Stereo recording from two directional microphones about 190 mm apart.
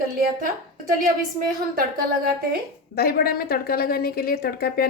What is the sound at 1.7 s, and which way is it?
Speech, 50° right (ahead or behind).